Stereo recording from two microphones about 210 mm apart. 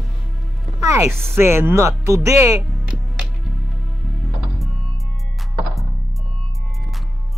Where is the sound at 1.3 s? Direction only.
10° right (ahead or behind).